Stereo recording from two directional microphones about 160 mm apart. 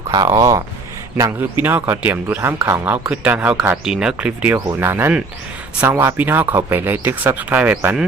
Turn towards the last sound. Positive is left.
turn(degrees=-5)  # may be behind; listen again after turning